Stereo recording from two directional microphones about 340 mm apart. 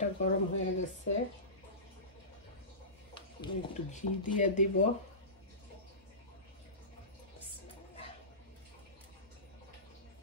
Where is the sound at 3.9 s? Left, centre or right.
Left.